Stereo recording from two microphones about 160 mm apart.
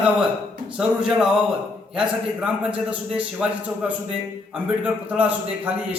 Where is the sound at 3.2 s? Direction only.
10° right (ahead or behind).